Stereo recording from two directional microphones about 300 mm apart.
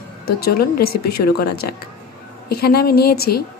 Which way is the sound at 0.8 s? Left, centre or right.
Left.